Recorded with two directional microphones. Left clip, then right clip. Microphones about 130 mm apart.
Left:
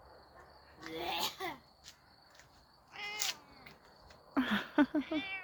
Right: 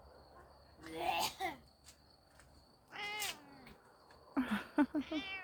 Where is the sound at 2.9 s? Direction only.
55° right (ahead or behind).